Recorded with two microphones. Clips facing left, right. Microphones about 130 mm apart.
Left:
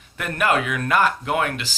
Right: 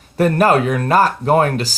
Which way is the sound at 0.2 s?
35° right (ahead or behind).